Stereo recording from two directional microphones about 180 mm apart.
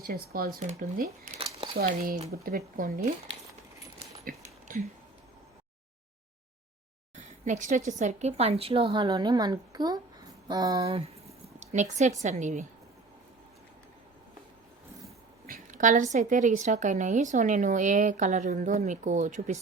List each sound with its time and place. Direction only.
0.0 s a woman's voice: 55° right (ahead or behind)
4.7 s speech: 50° right (ahead or behind)
7.2 s a sound: 45° right (ahead or behind)
7.9 s a woman's voice: 40° right (ahead or behind)
15.4 s a woman's voice: 50° right (ahead or behind)